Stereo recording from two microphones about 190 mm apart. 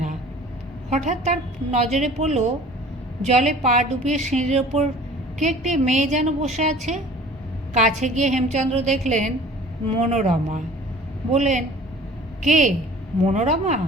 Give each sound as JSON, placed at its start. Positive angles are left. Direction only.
{"t": 0.9, "sound": "a woman's voice", "side_deg": -35}